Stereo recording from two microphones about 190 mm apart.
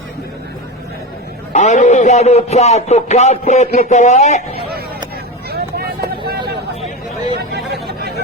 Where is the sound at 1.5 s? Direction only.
40° left (ahead or behind).